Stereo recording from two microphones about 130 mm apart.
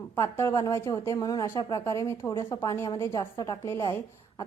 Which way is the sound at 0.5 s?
25° left (ahead or behind).